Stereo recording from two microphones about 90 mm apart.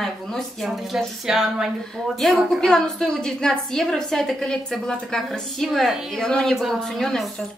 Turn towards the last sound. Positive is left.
turn(degrees=5)  # may be behind; listen again after turning